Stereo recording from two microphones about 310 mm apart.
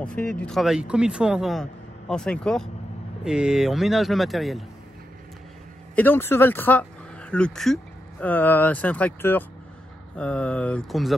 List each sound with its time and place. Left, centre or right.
0.0 s speech: centre
5.9 s speech: centre